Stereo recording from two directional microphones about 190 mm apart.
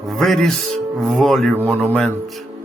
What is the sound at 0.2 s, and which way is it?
Speech, centre (ahead or behind).